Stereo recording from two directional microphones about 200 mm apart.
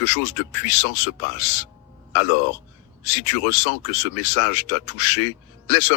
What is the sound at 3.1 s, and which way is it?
Speech, 60° left (ahead or behind).